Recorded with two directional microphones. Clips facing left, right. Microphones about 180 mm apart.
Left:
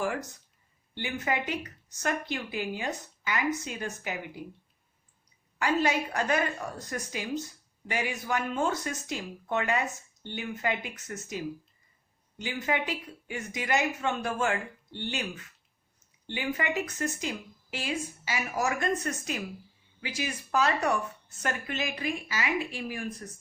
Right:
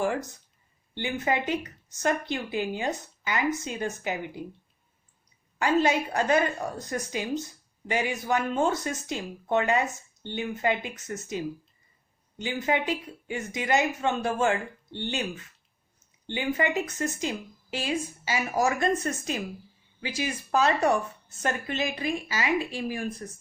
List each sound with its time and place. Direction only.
0.9 s a woman's voice: 25° right (ahead or behind)
5.5 s a woman's voice: 25° right (ahead or behind)